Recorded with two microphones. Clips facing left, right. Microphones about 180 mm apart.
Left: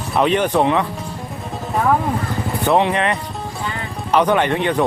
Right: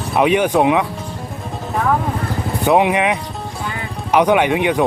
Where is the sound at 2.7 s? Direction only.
10° right (ahead or behind).